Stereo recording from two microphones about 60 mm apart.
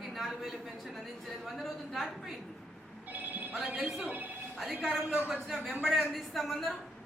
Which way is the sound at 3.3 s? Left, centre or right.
Right.